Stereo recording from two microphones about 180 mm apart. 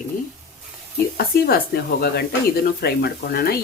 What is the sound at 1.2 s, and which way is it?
Speech, 60° left (ahead or behind).